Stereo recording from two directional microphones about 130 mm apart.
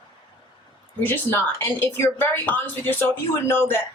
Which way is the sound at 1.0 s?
15° left (ahead or behind).